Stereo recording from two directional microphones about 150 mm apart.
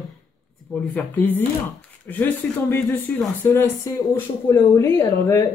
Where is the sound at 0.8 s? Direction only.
10° left (ahead or behind).